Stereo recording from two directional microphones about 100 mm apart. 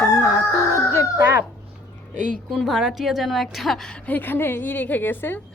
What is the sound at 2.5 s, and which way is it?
A woman's voice, centre (ahead or behind).